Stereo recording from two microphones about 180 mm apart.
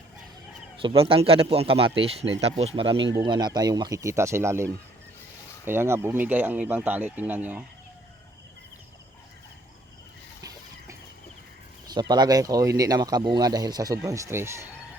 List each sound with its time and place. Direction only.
0.8 s speech: 30° right (ahead or behind); by 7.6 s 10° right (ahead or behind)
11.9 s speech: 25° right (ahead or behind)